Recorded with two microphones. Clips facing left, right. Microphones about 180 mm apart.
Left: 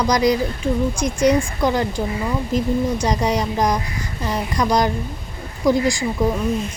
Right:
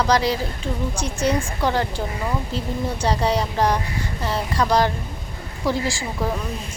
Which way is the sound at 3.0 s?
15° left (ahead or behind).